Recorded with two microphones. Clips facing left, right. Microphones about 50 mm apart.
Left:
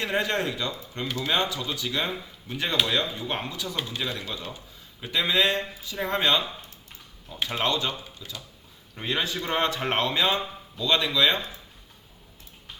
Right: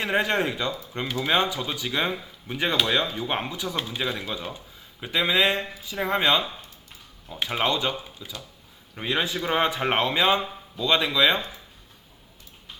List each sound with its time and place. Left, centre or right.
0.0 s speech: centre